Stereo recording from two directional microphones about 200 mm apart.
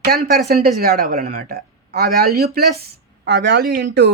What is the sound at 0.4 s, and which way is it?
Speech, 50° right (ahead or behind).